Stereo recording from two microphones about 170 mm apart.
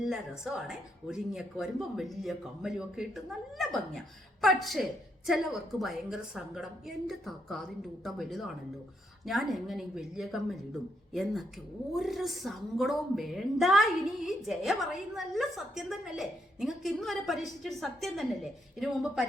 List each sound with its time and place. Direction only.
0.0 s speech: centre (ahead or behind)